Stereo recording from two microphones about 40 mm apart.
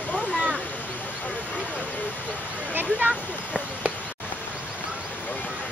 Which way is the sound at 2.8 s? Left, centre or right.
Right.